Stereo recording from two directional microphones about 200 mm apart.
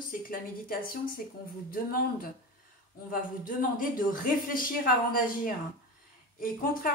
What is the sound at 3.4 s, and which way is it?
A woman's voice, 45° left (ahead or behind).